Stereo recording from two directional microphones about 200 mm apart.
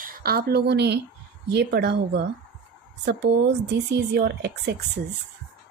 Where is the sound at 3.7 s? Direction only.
55° right (ahead or behind).